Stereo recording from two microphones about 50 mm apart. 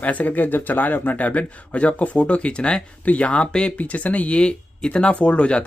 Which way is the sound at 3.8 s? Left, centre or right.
Left.